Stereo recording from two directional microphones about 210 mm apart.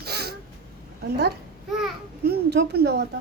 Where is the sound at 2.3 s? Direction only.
50° right (ahead or behind).